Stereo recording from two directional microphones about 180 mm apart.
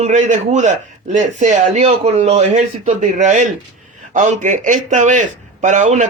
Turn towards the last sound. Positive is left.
turn(degrees=-45)  # may be behind; listen again after turning